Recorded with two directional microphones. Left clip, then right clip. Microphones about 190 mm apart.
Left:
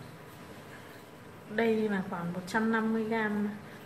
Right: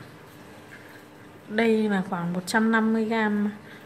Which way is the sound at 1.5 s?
50° right (ahead or behind).